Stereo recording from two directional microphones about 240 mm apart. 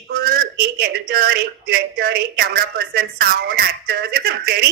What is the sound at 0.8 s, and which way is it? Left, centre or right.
A woman's voice, right.